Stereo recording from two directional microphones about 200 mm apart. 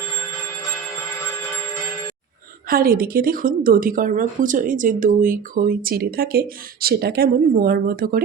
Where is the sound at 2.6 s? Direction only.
45° right (ahead or behind).